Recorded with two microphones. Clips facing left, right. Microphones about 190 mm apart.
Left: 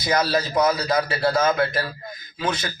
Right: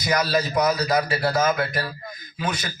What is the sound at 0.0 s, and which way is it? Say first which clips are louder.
A man's voice: left 1 dB; 25° left (ahead or behind).